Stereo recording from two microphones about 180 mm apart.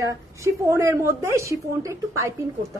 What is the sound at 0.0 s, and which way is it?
A woman's voice, 15° right (ahead or behind).